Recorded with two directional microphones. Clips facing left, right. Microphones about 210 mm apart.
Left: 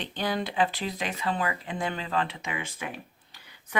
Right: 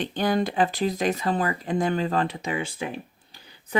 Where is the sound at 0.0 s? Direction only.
45° right (ahead or behind).